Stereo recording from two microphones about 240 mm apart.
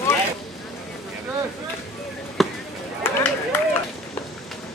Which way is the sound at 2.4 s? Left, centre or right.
Centre.